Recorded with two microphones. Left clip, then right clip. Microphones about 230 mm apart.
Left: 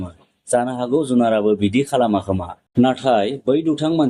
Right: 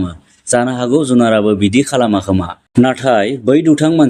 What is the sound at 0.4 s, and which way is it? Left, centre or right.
Speech, right.